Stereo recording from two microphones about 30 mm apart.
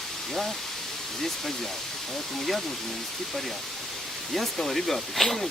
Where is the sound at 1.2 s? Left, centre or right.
Centre.